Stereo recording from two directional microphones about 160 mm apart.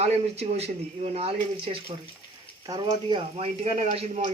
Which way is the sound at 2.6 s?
25° right (ahead or behind).